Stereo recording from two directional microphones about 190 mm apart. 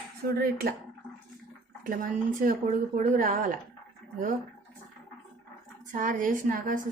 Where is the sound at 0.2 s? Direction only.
55° right (ahead or behind).